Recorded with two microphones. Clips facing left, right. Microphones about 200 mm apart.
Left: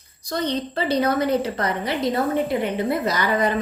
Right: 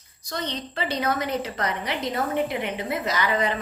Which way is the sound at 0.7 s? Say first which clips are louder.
Left 4 dB; 35° left (ahead or behind).